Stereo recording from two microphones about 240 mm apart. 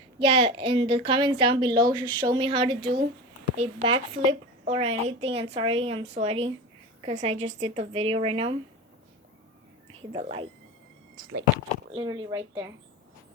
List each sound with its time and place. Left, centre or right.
0.2 s a woman's voice: right
10.0 s a woman's voice: right
11.9 s speech: centre